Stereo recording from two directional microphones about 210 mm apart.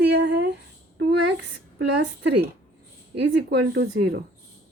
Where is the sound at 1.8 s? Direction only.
55° right (ahead or behind).